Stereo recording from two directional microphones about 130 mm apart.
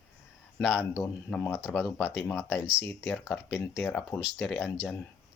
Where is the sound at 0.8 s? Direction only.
20° left (ahead or behind).